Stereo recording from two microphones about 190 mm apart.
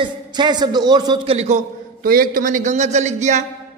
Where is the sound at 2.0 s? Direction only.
50° right (ahead or behind).